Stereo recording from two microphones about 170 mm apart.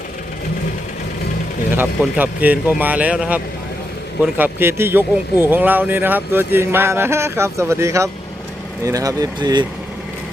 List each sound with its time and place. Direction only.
1.7 s speech: 10° right (ahead or behind)